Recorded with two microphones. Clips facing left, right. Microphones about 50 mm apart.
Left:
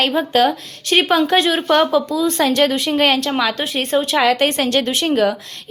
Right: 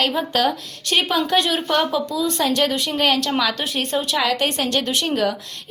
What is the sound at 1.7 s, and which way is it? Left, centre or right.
A woman's voice, left.